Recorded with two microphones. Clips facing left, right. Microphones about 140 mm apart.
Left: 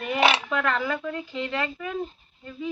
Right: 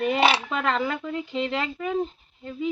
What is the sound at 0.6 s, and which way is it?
Speech, 25° right (ahead or behind).